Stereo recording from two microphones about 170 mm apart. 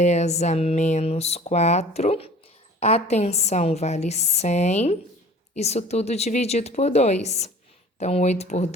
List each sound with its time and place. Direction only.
0.0 s speech: 40° left (ahead or behind)